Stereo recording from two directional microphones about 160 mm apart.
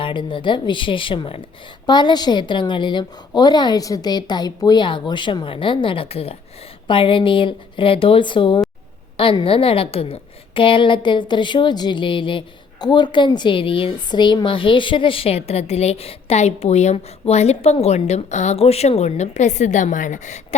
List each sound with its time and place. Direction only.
0.0 s a woman's voice: 30° left (ahead or behind); by 20.6 s 50° left (ahead or behind)